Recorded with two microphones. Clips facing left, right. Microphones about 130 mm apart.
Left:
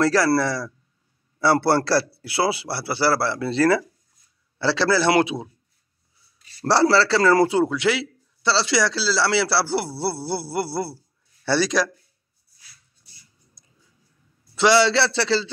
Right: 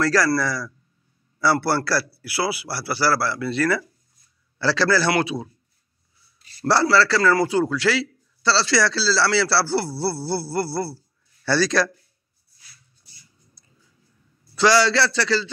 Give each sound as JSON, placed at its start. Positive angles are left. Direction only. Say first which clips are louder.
{"t": 0.0, "sound": "a man's voice", "louder": "left 2 dB", "side_deg": 25}
{"t": 6.6, "sound": "a man's voice", "louder": "left 1 dB", "side_deg": 30}
{"t": 14.5, "sound": "a man's voice", "louder": "left 1 dB", "side_deg": 25}